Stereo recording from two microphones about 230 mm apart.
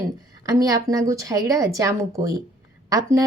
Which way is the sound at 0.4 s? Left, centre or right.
Centre.